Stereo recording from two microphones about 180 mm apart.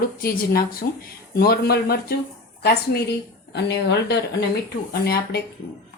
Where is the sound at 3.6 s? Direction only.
70° left (ahead or behind).